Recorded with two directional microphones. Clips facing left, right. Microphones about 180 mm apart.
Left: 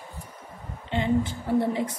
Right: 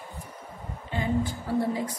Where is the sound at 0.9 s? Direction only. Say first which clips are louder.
Left 3 dB; 25° left (ahead or behind).